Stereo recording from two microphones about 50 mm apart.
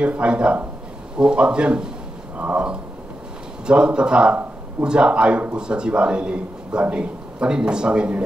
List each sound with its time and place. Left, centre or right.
0.0 s a man's voice: right